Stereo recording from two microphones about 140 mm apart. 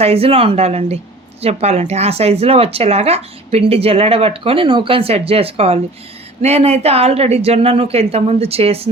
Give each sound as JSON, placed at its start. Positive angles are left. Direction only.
{"t": 0.0, "sound": "speech", "side_deg": -45}